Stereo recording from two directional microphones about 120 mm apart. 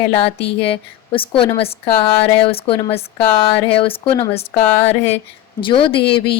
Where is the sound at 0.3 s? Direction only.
50° left (ahead or behind).